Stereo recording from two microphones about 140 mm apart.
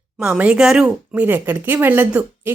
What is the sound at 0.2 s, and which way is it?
A woman's voice, 10° right (ahead or behind).